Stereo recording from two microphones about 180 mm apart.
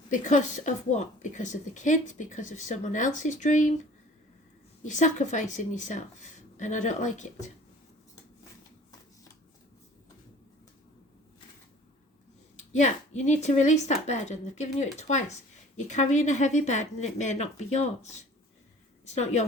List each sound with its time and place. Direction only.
0.1 s a woman's voice: 45° left (ahead or behind)
4.9 s a woman's voice: 45° left (ahead or behind)
12.5 s a woman's voice: 40° left (ahead or behind)